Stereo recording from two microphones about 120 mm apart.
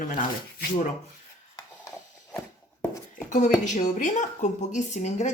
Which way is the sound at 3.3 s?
90° left.